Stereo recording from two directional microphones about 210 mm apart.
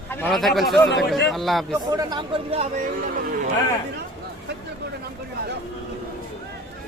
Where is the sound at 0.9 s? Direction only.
55° left (ahead or behind).